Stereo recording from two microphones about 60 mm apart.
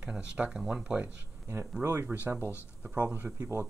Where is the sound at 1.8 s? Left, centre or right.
Right.